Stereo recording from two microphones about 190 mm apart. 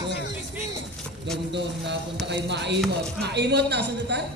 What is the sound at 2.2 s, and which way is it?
Speech, 65° right (ahead or behind).